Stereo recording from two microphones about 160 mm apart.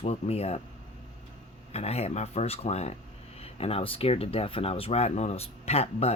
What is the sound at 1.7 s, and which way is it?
Speech, 40° left (ahead or behind).